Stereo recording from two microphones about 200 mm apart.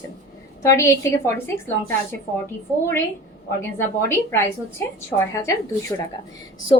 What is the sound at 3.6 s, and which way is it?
Speech, 10° left (ahead or behind).